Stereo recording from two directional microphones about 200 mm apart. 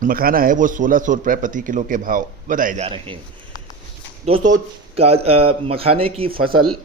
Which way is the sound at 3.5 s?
20° left (ahead or behind).